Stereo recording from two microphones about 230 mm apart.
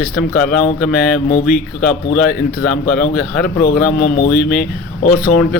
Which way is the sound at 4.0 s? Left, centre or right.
Left.